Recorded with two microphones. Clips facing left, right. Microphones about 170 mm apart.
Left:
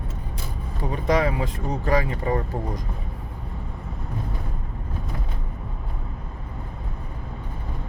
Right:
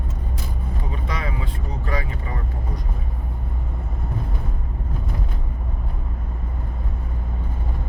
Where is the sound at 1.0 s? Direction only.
40° left (ahead or behind).